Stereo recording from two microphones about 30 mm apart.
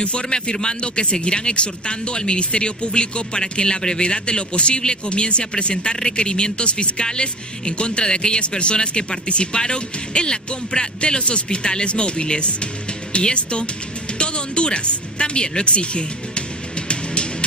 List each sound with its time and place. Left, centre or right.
0.0 s a man's voice: left
5.4 s a man's voice: left
14.1 s music: left